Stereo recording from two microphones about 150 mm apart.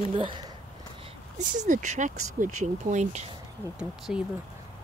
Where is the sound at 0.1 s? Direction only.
35° right (ahead or behind).